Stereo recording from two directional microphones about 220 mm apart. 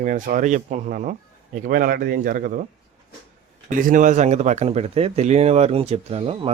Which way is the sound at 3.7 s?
40° right (ahead or behind).